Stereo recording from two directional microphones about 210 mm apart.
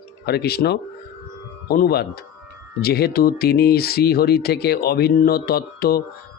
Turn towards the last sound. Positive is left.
turn(degrees=45)  # may be behind; listen again after turning